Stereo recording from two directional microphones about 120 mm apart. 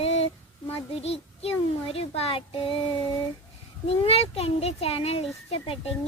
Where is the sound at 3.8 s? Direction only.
55° left (ahead or behind).